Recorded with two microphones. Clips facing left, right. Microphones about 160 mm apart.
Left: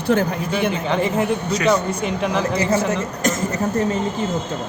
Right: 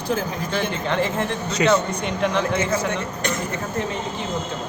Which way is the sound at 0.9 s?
Centre (ahead or behind).